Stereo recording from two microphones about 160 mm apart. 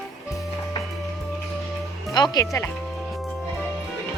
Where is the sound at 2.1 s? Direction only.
25° left (ahead or behind).